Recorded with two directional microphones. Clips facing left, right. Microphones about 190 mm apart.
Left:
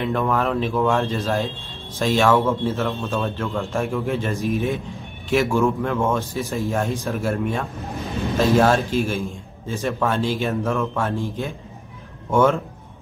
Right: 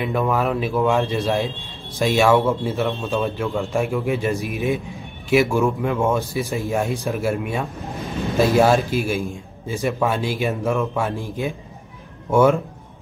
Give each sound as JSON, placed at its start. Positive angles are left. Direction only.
{"t": 0.0, "sound": "speech", "side_deg": -10}